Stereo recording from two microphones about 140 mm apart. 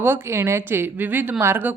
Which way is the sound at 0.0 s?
15° right (ahead or behind).